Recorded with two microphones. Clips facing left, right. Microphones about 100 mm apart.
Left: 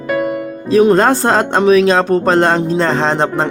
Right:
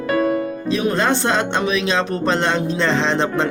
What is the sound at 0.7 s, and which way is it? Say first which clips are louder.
Speech: left 9 dB; 40° left (ahead or behind).